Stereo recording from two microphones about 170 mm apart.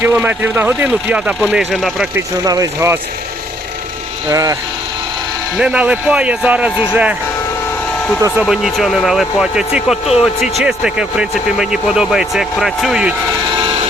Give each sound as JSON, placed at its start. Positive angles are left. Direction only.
{"t": 0.0, "sound": "speech", "side_deg": -10}
{"t": 2.1, "sound": "speech", "side_deg": -20}
{"t": 4.3, "sound": "speech", "side_deg": -20}
{"t": 5.5, "sound": "speech", "side_deg": -5}
{"t": 8.4, "sound": "speech", "side_deg": 0}